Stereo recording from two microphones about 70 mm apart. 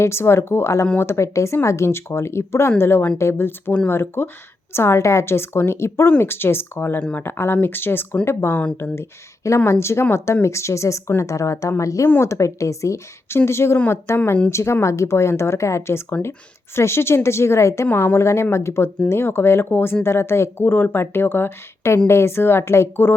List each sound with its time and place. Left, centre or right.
0.0 s speech: left
8.8 s speech: left